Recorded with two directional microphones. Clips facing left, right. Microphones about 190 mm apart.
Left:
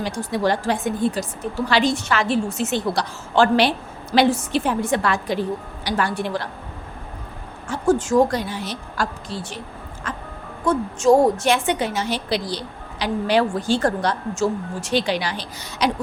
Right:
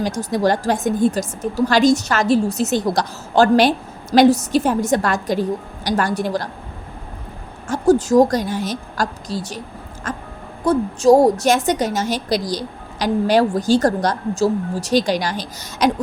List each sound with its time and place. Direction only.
0.0 s a woman's voice: 40° right (ahead or behind)
7.7 s a woman's voice: 35° right (ahead or behind)
10.0 s music: 45° right (ahead or behind)
10.6 s a woman's voice: 35° right (ahead or behind)